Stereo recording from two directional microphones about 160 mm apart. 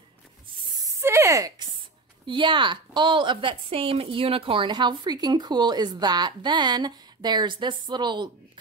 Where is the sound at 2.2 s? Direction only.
30° right (ahead or behind).